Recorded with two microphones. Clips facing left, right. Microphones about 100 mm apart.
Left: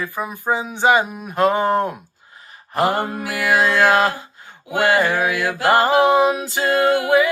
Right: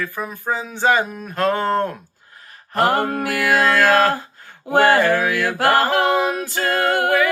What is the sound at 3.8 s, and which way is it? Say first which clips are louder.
Music: even; 15° left (ahead or behind).